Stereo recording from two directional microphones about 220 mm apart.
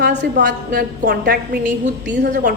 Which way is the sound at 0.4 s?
45° right (ahead or behind).